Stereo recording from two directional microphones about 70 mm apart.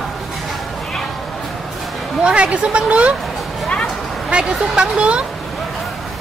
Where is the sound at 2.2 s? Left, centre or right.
Centre.